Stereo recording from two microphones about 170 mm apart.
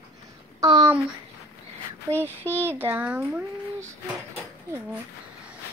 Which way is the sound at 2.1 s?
15° right (ahead or behind).